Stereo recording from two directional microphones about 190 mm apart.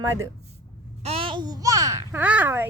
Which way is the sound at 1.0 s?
30° right (ahead or behind).